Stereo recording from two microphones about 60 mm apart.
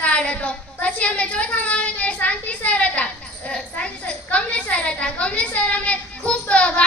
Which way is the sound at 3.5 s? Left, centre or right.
Centre.